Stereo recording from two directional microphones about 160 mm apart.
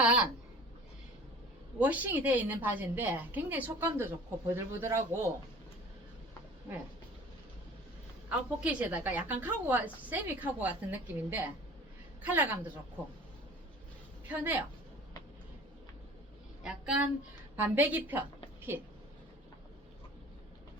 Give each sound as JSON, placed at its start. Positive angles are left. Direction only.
{"t": 0.0, "sound": "a woman's voice", "side_deg": -5}
{"t": 1.8, "sound": "a woman's voice", "side_deg": -10}
{"t": 8.3, "sound": "a woman's voice", "side_deg": -10}
{"t": 14.3, "sound": "a woman's voice", "side_deg": -10}
{"t": 16.6, "sound": "a woman's voice", "side_deg": -5}